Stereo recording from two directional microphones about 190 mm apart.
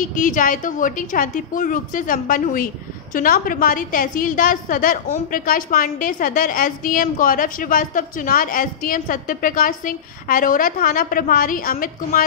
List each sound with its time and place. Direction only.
0.0 s a woman's voice: 45° left (ahead or behind)